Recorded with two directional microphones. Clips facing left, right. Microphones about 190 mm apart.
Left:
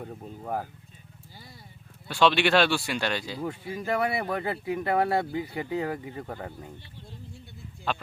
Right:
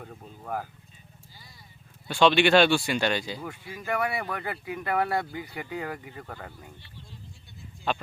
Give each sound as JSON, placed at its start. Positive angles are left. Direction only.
{"t": 0.0, "sound": "speech", "side_deg": 25}
{"t": 2.0, "sound": "speech", "side_deg": 0}
{"t": 3.4, "sound": "speech", "side_deg": 30}